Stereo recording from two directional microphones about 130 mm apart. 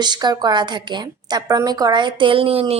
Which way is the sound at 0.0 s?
35° right (ahead or behind).